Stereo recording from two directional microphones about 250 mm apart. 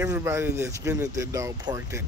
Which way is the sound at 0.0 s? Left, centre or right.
Centre.